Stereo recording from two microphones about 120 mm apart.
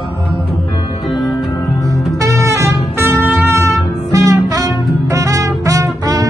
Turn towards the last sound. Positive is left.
turn(degrees=-30)  # may be behind; listen again after turning